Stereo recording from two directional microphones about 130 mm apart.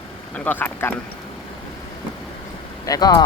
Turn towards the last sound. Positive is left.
turn(degrees=30)  # may be behind; listen again after turning